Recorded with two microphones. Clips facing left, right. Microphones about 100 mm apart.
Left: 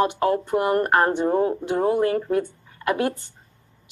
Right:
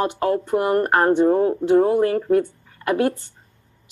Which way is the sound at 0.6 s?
30° right (ahead or behind).